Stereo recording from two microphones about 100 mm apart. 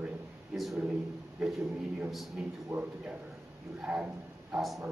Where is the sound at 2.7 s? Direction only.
20° right (ahead or behind); by 4.8 s centre (ahead or behind).